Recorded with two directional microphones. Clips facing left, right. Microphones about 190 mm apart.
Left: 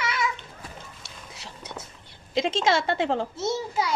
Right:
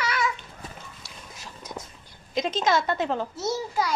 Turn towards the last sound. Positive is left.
turn(degrees=25)  # may be behind; listen again after turning